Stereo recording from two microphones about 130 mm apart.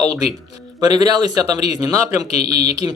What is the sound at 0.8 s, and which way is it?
Speech, 30° right (ahead or behind).